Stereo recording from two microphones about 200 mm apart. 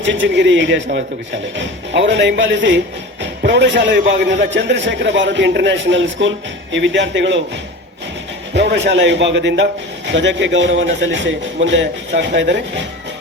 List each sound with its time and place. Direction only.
0.0 s speech: 65° right (ahead or behind)